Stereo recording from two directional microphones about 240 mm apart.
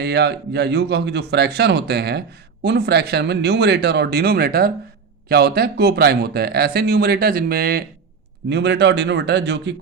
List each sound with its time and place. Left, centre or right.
0.0 s speech: right